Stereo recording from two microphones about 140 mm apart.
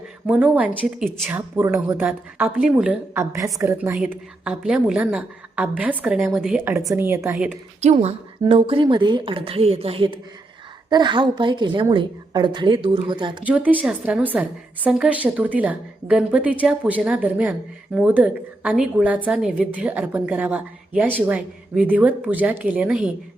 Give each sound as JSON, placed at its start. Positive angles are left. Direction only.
{"t": 0.3, "sound": "a woman's voice", "side_deg": -10}
{"t": 2.0, "sound": "a woman's voice", "side_deg": -5}
{"t": 3.2, "sound": "a woman's voice", "side_deg": -25}
{"t": 4.1, "sound": "a woman's voice", "side_deg": -10}
{"t": 7.3, "sound": "a woman's voice", "side_deg": -5}
{"t": 7.8, "sound": "speech", "side_deg": -55}
{"t": 8.4, "sound": "a woman's voice", "side_deg": -40}
{"t": 13.4, "sound": "a woman's voice", "side_deg": -10}